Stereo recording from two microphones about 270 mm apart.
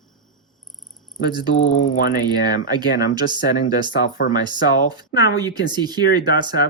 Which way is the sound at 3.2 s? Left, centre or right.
Centre.